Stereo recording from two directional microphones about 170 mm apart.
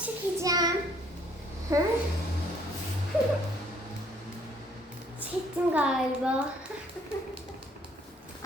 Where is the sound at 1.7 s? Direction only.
15° right (ahead or behind).